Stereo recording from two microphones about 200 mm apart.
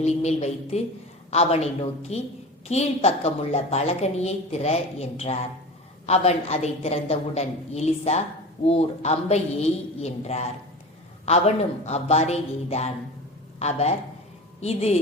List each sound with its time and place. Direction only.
0.0 s a woman's voice: 35° left (ahead or behind)